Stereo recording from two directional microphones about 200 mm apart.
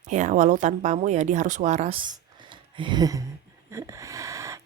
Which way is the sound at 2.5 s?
25° right (ahead or behind).